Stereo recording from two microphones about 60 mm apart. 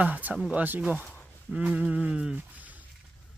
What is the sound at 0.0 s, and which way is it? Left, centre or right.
Speech, right.